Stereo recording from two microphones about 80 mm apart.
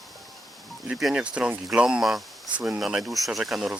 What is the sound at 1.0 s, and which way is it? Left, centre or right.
Speech, centre.